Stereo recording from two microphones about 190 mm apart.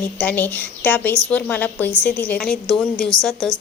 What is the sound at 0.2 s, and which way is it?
A woman's voice, 10° left (ahead or behind).